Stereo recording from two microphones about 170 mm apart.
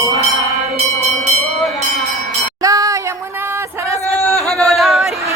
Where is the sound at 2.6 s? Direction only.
20° right (ahead or behind).